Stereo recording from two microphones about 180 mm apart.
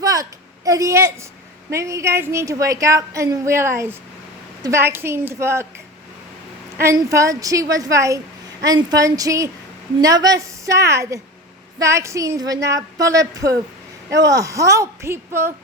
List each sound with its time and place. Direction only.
0.0 s a sound: 20° right (ahead or behind)
1.7 s a woman's voice: 15° right (ahead or behind)
6.7 s a woman's voice: 15° right (ahead or behind)